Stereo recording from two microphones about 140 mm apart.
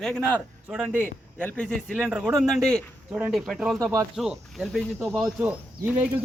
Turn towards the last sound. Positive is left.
turn(degrees=-10)  # may be behind; listen again after turning